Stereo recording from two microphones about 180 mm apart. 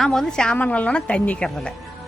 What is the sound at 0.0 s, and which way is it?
A woman's voice, centre (ahead or behind).